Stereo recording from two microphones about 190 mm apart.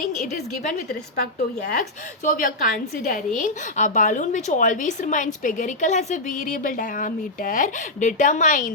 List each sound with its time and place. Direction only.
0.3 s a woman's voice: 55° left (ahead or behind)